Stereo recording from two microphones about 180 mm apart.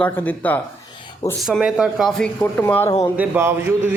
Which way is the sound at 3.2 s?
15° right (ahead or behind).